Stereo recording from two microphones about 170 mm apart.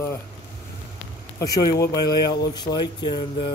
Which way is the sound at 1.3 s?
20° left (ahead or behind).